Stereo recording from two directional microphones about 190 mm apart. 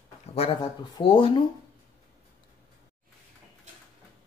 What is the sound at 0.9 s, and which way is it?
Speech, 25° left (ahead or behind).